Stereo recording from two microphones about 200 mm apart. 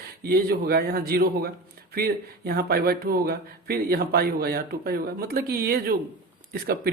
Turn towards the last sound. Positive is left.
turn(degrees=-50)  # may be behind; listen again after turning